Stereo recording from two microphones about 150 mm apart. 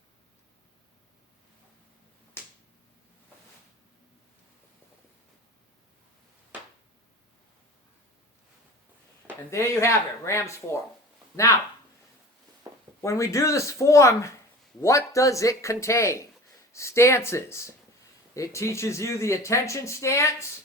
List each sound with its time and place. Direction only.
9.5 s speech: 20° left (ahead or behind)
13.0 s speech: 20° left (ahead or behind)